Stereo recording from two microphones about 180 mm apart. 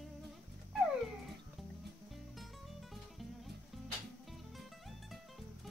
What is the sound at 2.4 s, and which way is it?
Music, centre (ahead or behind).